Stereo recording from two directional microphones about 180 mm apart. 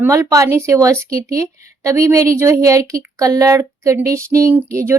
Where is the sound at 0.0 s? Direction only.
15° right (ahead or behind).